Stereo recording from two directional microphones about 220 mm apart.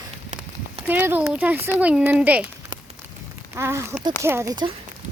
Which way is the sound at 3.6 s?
10° right (ahead or behind).